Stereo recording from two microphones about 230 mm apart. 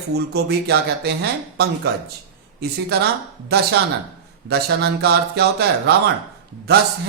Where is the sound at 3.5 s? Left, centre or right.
Right.